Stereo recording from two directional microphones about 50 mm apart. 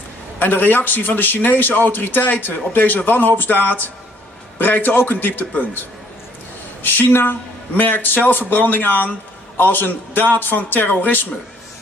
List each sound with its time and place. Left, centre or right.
0.4 s a man's voice: left